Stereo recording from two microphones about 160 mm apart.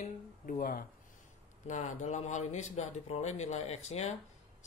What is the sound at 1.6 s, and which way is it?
Speech, 45° left (ahead or behind).